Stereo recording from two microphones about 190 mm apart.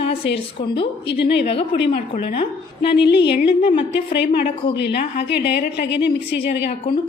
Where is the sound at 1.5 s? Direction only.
30° left (ahead or behind).